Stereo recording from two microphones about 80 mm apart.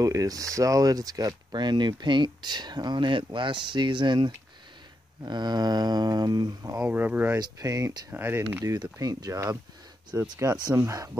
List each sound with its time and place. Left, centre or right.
0.0 s speech: right
1.6 s speech: right
5.2 s speech: right
6.8 s speech: right
7.3 s speech: right
8.1 s speech: right
9.0 s speech: right
10.4 s speech: right